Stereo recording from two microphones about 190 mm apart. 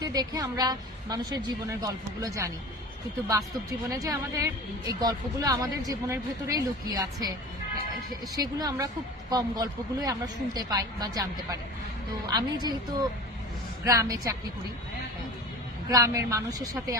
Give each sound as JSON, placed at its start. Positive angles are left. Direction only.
{"t": 0.0, "sound": "a woman's voice", "side_deg": -20}
{"t": 3.8, "sound": "a woman's voice", "side_deg": -20}
{"t": 8.4, "sound": "a woman's voice", "side_deg": -20}
{"t": 15.9, "sound": "a woman's voice", "side_deg": -15}